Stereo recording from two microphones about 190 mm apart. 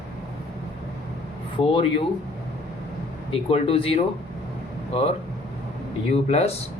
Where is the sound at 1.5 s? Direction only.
25° left (ahead or behind).